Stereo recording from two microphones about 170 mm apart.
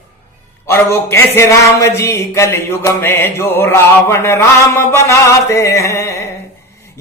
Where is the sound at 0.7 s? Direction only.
15° left (ahead or behind).